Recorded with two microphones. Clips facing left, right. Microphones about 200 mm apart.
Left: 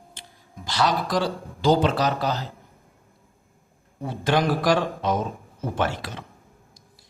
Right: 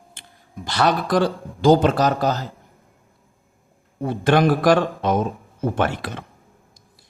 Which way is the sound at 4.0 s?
55° right (ahead or behind).